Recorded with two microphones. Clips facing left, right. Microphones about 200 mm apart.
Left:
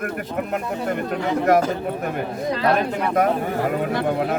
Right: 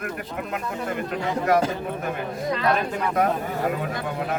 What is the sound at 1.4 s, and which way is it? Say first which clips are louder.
Speech: left 3 dB; 45° left (ahead or behind).